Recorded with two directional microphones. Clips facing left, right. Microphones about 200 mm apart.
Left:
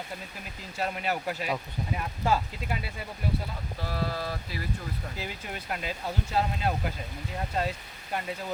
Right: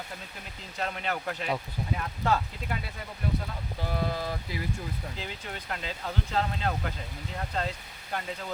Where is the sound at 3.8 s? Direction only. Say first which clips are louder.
Right 1 dB; 15° right (ahead or behind).